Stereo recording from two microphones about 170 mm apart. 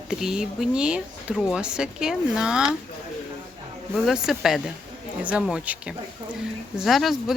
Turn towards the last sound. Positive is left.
turn(degrees=0)  # may be behind; listen again after turning